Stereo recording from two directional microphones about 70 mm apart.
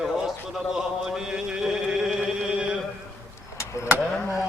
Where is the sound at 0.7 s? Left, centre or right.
Centre.